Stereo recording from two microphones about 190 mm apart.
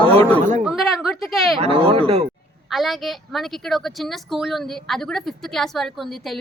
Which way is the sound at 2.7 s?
Centre (ahead or behind).